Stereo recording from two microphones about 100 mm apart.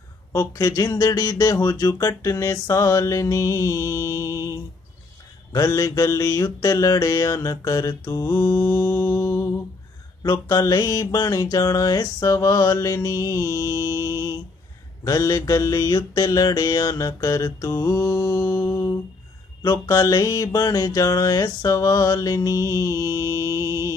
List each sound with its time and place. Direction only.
0.3 s mantra: 35° left (ahead or behind)